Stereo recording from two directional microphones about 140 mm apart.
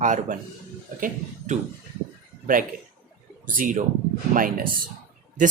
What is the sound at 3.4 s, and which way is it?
Speech, 75° right (ahead or behind).